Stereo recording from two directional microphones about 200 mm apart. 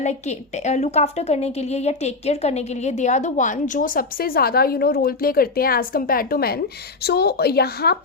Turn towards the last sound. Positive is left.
turn(degrees=50)  # may be behind; listen again after turning